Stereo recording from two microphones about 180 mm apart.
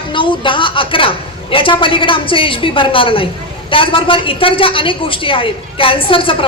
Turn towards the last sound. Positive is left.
turn(degrees=30)  # may be behind; listen again after turning